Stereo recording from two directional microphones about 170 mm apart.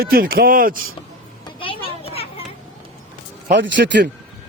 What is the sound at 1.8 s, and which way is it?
Children playing, 35° left (ahead or behind).